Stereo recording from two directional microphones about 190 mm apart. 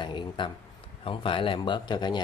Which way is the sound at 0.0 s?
25° left (ahead or behind).